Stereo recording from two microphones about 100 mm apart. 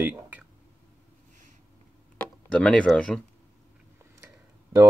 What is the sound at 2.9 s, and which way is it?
Speech, 10° left (ahead or behind).